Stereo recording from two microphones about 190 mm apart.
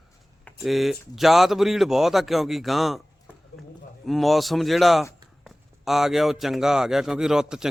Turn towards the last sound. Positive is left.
turn(degrees=-5)  # may be behind; listen again after turning